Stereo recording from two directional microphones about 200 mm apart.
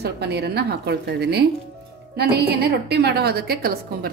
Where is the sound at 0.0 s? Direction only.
55° right (ahead or behind).